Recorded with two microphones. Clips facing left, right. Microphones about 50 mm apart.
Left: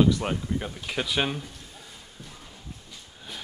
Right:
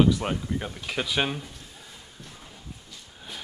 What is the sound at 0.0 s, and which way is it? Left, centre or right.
Speech, centre.